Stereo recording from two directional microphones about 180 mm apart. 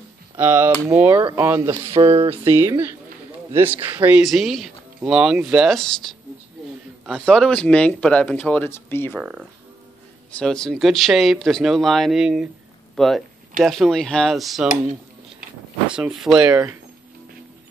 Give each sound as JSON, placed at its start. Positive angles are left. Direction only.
{"t": 0.4, "sound": "speech", "side_deg": -10}
{"t": 2.0, "sound": "speech", "side_deg": -30}
{"t": 2.2, "sound": "speech", "side_deg": -15}
{"t": 9.2, "sound": "speech", "side_deg": -5}
{"t": 15.9, "sound": "speech", "side_deg": -5}